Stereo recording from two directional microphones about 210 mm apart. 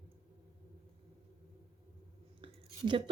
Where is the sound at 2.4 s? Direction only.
20° right (ahead or behind).